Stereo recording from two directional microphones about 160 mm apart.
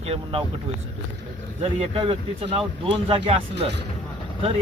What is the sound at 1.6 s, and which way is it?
Speech, 35° right (ahead or behind).